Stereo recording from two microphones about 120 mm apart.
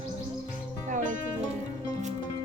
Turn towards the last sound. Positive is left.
turn(degrees=-90)